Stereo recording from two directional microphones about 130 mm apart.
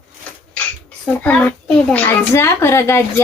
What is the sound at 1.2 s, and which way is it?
A child's voice, 10° left (ahead or behind).